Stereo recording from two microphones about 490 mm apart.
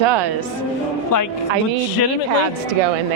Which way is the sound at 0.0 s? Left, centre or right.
Right.